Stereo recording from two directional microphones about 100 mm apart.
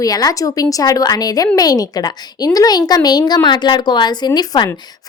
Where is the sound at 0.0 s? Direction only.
40° left (ahead or behind).